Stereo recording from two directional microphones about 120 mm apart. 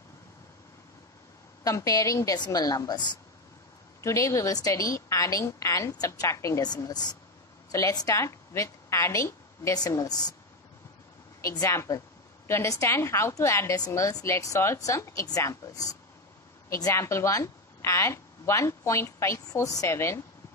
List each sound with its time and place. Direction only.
1.6 s a woman's voice: 30° left (ahead or behind)
11.4 s a woman's voice: 25° left (ahead or behind)